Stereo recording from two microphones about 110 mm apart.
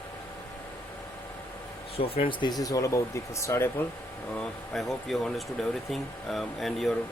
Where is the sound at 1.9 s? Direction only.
60° left (ahead or behind); by 3.7 s 25° left (ahead or behind).